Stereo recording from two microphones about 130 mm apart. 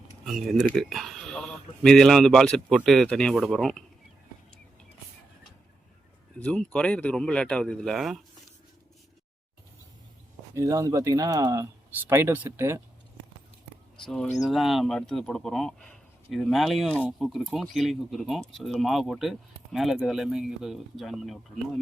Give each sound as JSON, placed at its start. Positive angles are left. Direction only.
{"t": 0.3, "sound": "speech", "side_deg": 0}
{"t": 6.4, "sound": "speech", "side_deg": 10}
{"t": 10.5, "sound": "speech", "side_deg": -25}
{"t": 13.9, "sound": "speech", "side_deg": 5}